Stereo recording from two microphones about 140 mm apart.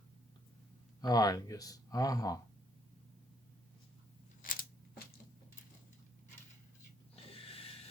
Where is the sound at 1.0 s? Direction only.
25° left (ahead or behind).